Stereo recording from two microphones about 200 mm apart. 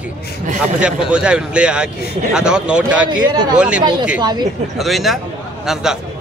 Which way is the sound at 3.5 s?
5° right (ahead or behind).